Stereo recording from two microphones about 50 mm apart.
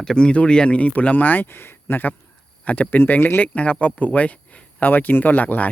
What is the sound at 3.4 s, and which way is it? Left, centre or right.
Speech, left.